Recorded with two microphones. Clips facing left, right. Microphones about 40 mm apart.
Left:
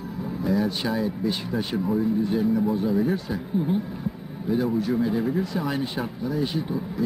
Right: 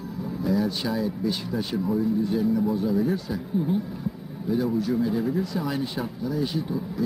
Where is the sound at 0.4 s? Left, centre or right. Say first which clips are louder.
Left 1 dB; left.